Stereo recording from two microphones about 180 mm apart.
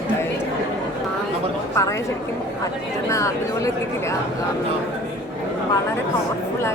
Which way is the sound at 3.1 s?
15° left (ahead or behind).